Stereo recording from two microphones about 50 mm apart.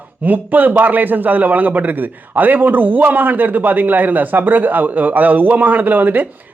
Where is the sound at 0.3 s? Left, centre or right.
Right.